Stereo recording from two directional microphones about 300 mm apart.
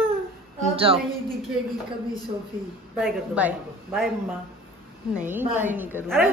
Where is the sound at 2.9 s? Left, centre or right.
Centre.